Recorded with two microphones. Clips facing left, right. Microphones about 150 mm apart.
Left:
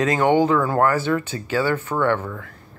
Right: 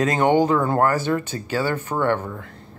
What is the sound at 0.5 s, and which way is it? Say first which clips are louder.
Speech: even; 25° right (ahead or behind).